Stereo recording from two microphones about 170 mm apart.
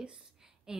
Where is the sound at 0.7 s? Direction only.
5° right (ahead or behind).